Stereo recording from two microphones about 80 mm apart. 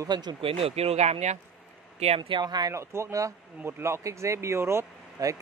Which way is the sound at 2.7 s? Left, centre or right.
Right.